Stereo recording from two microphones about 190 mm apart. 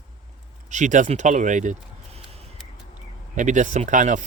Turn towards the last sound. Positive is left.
turn(degrees=-40)  # may be behind; listen again after turning